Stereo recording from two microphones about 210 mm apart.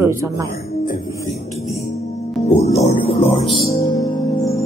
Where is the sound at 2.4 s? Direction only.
30° left (ahead or behind).